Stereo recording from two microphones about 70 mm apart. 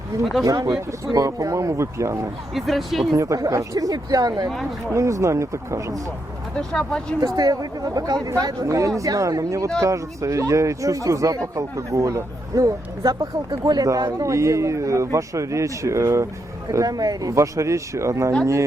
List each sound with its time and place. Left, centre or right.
0.4 s speech: right
2.6 s speech: centre
3.2 s speech: right
4.9 s speech: right
6.6 s speech: centre
7.2 s speech: right
8.6 s speech: right
13.5 s speech: right
16.7 s speech: right
17.3 s speech: right